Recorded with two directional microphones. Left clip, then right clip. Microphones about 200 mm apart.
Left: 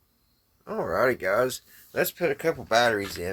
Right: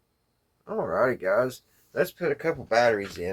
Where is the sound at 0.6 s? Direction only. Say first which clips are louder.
Even; 30° left (ahead or behind).